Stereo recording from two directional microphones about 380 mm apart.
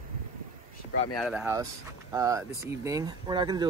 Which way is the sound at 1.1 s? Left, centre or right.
Centre.